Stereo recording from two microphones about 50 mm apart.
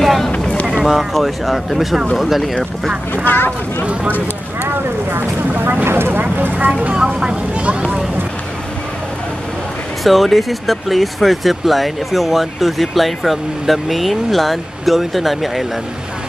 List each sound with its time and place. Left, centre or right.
0.0 s boat: centre
0.4 s boat: left
0.7 s boat: centre
1.1 s speech: centre
3.3 s speech: left
3.8 s speech: right
5.1 s speech: right
5.9 s vehicle: right
6.2 s vehicle: right
6.9 s speech: centre
10.0 s speech: centre